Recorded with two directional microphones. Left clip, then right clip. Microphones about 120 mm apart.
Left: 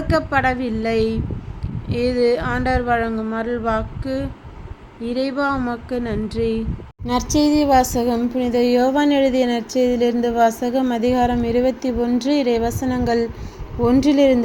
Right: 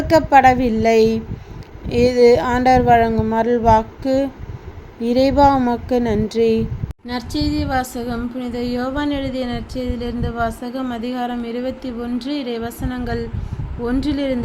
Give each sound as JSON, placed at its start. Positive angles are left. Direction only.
{"t": 0.1, "sound": "speech", "side_deg": -20}
{"t": 7.1, "sound": "a woman's voice", "side_deg": 25}